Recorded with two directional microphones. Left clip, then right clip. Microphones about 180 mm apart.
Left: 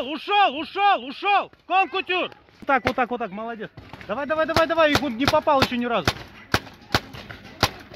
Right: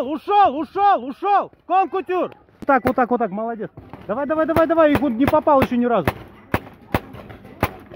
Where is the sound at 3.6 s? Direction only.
55° right (ahead or behind).